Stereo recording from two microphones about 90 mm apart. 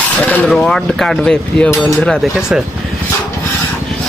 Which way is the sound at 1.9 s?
Centre (ahead or behind).